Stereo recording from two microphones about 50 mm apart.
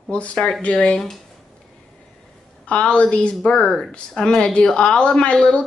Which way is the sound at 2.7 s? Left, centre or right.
Left.